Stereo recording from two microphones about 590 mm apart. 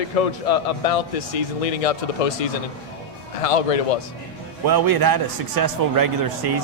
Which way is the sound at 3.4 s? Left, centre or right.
Left.